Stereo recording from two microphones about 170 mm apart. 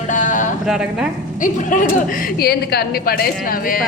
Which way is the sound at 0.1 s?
45° left (ahead or behind).